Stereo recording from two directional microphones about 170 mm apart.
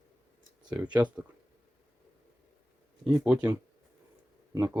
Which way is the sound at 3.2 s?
5° right (ahead or behind).